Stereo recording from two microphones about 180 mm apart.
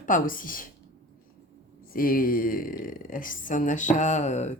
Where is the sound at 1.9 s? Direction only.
55° left (ahead or behind).